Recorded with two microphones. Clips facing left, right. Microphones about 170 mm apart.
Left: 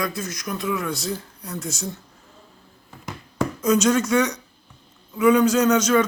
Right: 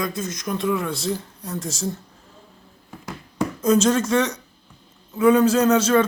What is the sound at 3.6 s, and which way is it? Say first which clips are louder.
A man's voice: right 1 dB; 25° right (ahead or behind).